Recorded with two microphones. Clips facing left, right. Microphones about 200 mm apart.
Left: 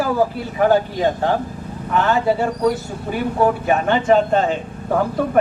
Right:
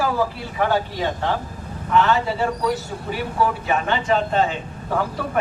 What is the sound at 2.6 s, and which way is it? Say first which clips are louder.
Speech: left 4 dB; 50° left (ahead or behind).